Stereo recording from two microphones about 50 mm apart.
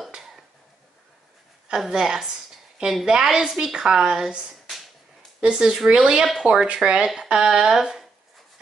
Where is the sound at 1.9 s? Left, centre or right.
Centre.